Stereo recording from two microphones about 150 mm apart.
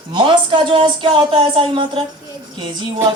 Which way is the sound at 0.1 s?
35° right (ahead or behind).